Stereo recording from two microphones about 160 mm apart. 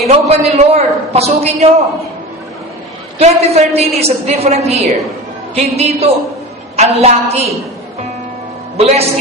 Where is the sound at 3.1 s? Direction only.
40° right (ahead or behind).